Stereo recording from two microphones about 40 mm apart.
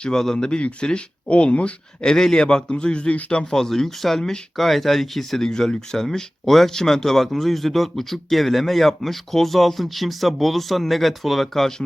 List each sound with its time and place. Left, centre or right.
0.0 s speech: centre
0.4 s speech: left
2.1 s speech: centre; by 3.4 s left
3.4 s speech: centre